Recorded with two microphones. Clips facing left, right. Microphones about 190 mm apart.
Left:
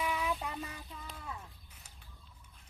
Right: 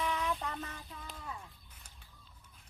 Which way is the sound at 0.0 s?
5° left (ahead or behind).